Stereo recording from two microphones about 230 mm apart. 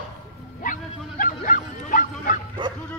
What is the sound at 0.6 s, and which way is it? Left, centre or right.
Speech, left.